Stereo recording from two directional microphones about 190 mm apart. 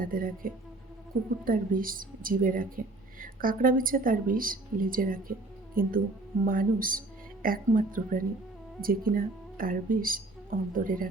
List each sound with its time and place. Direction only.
0.0 s a woman's voice: 45° right (ahead or behind)